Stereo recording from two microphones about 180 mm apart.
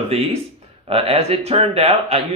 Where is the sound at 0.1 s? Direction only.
35° right (ahead or behind).